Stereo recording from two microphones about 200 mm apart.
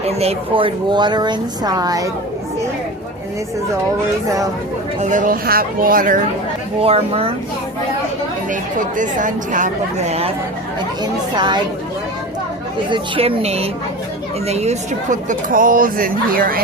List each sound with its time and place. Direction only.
0.0 s a woman's voice: 30° right (ahead or behind)
4.9 s a woman's voice: 40° right (ahead or behind)
6.7 s a woman's voice: 30° right (ahead or behind)
8.4 s a woman's voice: 40° right (ahead or behind); by 11.6 s 20° right (ahead or behind)
12.9 s a woman's voice: 30° right (ahead or behind); by 16.6 s 45° right (ahead or behind)